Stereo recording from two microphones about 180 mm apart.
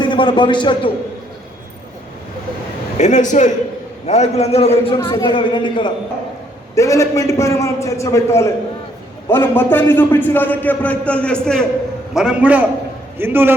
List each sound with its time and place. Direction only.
0.0 s a man's voice: 25° left (ahead or behind)
3.0 s a man's voice: 40° left (ahead or behind); by 13.5 s 10° right (ahead or behind)